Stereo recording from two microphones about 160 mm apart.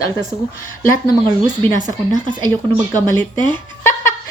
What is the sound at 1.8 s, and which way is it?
Speech, 25° right (ahead or behind).